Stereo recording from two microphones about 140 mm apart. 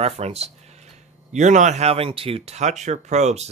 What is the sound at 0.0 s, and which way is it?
Speech, 50° right (ahead or behind).